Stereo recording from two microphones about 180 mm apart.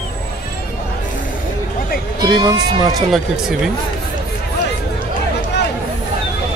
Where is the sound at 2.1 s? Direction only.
25° right (ahead or behind).